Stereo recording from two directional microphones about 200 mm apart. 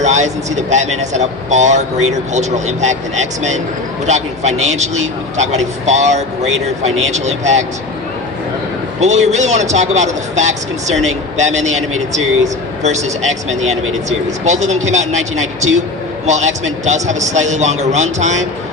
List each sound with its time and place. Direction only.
0.0 s speech: 35° right (ahead or behind)
9.0 s speech: 35° right (ahead or behind)